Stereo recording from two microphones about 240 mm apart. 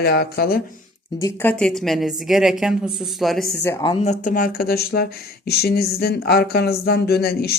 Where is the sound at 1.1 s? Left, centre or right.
Centre.